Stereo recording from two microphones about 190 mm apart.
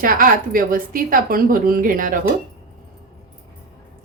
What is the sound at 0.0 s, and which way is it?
A woman's voice, 50° right (ahead or behind).